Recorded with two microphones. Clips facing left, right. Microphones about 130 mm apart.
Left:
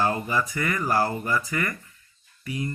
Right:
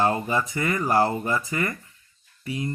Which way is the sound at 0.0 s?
25° right (ahead or behind).